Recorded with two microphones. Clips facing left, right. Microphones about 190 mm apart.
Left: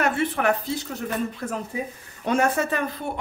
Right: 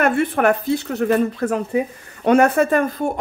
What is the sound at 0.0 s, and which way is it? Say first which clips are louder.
Speech: right 6 dB; 55° right (ahead or behind).